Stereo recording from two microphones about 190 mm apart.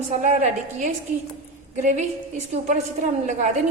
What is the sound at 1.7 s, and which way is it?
A woman's voice, 40° right (ahead or behind).